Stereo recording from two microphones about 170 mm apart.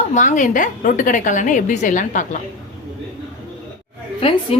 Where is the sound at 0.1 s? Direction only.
45° left (ahead or behind).